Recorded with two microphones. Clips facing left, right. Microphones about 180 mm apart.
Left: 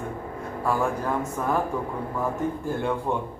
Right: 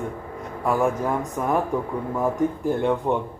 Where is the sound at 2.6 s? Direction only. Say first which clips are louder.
Right 5 dB; 20° right (ahead or behind).